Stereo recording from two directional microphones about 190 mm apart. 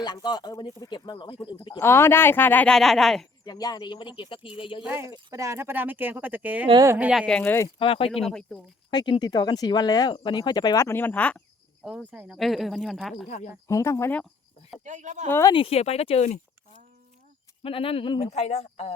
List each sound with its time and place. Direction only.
0.0 s speech: 20° left (ahead or behind)
1.8 s speech: 15° left (ahead or behind)
3.4 s speech: 20° left (ahead or behind)
4.8 s speech: 10° right (ahead or behind)
7.1 s speech: centre (ahead or behind)
7.8 s speech: 30° left (ahead or behind)
8.2 s speech: 5° left (ahead or behind)
8.9 s speech: 25° left (ahead or behind); by 11.4 s 5° left (ahead or behind)
11.8 s speech: 5° right (ahead or behind)
13.2 s speech: 40° left (ahead or behind)
13.7 s speech: 15° left (ahead or behind)
14.8 s a woman's voice: 40° right (ahead or behind)
15.3 s speech: 15° left (ahead or behind)
15.5 s speech: 30° left (ahead or behind)